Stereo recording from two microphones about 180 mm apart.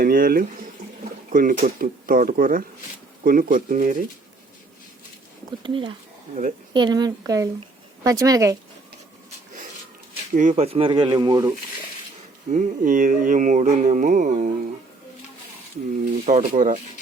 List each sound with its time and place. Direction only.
0.0 s music: 55° right (ahead or behind)
5.5 s speech: 25° right (ahead or behind)
10.3 s speech: 40° right (ahead or behind); by 11.5 s 20° right (ahead or behind)
12.5 s music: 45° right (ahead or behind)
16.2 s music: 45° right (ahead or behind)